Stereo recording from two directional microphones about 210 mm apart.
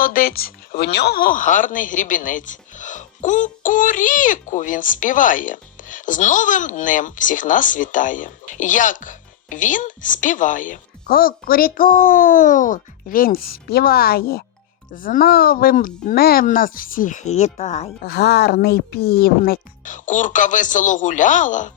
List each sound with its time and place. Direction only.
0.0 s speech: 40° left (ahead or behind)
18.0 s speech: 50° left (ahead or behind)